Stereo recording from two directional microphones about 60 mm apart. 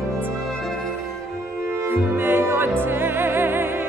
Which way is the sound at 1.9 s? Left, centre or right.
Right.